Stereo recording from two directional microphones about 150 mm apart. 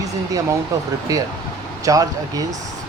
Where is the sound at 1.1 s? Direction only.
25° right (ahead or behind).